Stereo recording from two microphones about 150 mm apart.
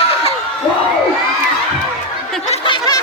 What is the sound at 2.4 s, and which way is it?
Snicker, 35° left (ahead or behind).